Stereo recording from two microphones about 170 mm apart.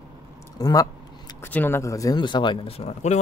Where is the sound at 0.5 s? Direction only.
20° left (ahead or behind); by 3.2 s 40° left (ahead or behind).